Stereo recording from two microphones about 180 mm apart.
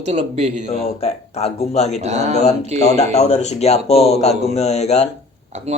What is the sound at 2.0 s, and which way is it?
Speech, 35° right (ahead or behind).